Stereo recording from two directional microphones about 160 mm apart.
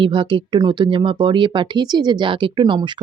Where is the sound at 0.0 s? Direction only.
30° right (ahead or behind).